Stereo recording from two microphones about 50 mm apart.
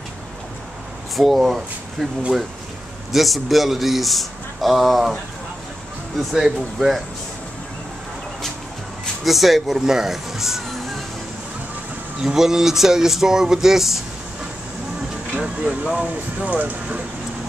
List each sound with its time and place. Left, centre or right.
1.1 s speech: centre
3.1 s a man's voice: centre
6.1 s a man's voice: centre
9.2 s a man's voice: centre
12.2 s speech: centre
15.3 s speech: right